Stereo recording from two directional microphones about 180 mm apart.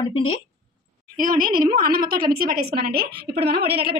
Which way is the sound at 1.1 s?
50° right (ahead or behind).